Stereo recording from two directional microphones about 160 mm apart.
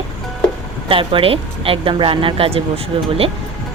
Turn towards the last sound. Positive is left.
turn(degrees=-35)  # may be behind; listen again after turning